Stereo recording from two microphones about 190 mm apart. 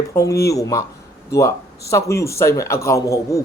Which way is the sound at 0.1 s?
15° left (ahead or behind).